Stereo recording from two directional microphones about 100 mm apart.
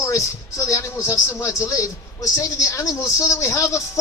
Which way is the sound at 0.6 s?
30° left (ahead or behind).